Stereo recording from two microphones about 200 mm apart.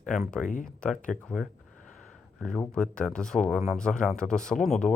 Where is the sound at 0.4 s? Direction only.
40° left (ahead or behind).